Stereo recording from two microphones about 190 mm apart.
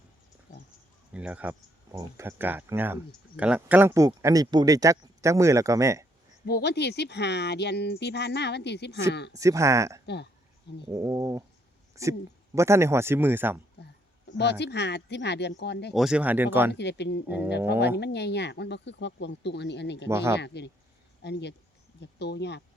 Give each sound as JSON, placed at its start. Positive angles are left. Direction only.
{"t": 1.1, "sound": "speech", "side_deg": -5}
{"t": 6.4, "sound": "speech", "side_deg": 60}
{"t": 9.3, "sound": "speech", "side_deg": -15}
{"t": 14.6, "sound": "speech", "side_deg": 65}
{"t": 15.9, "sound": "speech", "side_deg": 0}
{"t": 16.7, "sound": "speech", "side_deg": 65}
{"t": 17.2, "sound": "speech", "side_deg": -10}
{"t": 17.7, "sound": "speech", "side_deg": 60}
{"t": 20.1, "sound": "speech", "side_deg": -15}
{"t": 20.4, "sound": "speech", "side_deg": 65}